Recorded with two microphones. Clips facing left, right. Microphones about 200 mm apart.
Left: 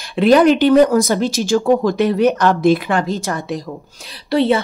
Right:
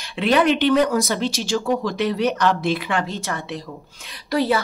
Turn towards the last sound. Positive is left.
turn(degrees=25)  # may be behind; listen again after turning